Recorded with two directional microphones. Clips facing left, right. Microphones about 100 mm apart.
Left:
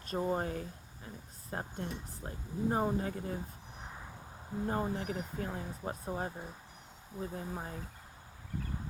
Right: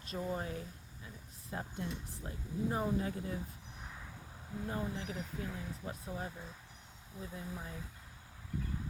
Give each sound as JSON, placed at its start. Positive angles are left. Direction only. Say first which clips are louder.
{"t": 0.0, "sound": "speech", "louder": "left 5 dB", "side_deg": 40}
{"t": 3.8, "sound": "vehicle", "louder": "left 3 dB", "side_deg": 25}
{"t": 4.6, "sound": "speech", "louder": "left 5 dB", "side_deg": 40}